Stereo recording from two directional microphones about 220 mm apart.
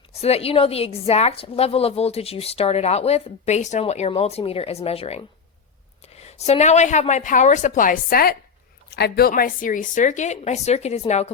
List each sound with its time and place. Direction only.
0.2 s a woman's voice: 25° left (ahead or behind)